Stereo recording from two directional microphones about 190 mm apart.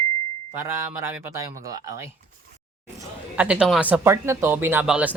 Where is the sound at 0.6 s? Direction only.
15° right (ahead or behind).